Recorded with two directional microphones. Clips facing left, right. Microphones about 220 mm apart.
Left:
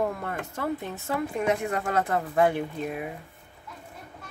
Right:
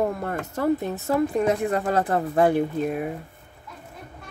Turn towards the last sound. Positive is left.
turn(degrees=-40)  # may be behind; listen again after turning